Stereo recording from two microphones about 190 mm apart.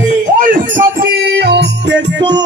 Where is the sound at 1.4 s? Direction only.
60° right (ahead or behind).